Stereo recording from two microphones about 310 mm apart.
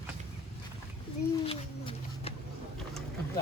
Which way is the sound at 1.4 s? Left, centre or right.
Centre.